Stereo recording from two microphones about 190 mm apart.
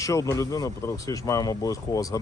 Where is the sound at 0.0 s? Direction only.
15° left (ahead or behind).